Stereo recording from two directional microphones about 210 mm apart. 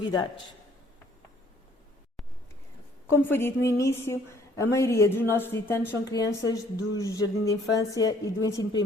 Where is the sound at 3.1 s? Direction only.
10° left (ahead or behind).